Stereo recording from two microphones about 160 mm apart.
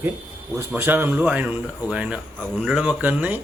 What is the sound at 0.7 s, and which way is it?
Speech, 15° right (ahead or behind).